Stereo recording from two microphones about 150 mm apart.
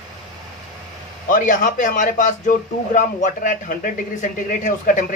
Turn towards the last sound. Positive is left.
turn(degrees=60)  # may be behind; listen again after turning